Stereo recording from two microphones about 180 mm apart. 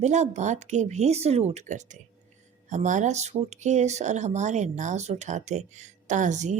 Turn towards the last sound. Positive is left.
turn(degrees=-40)  # may be behind; listen again after turning